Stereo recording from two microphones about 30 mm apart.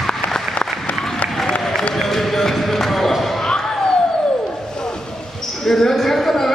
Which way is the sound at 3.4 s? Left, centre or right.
Centre.